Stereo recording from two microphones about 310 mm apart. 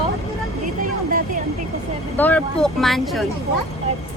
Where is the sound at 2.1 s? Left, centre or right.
Centre.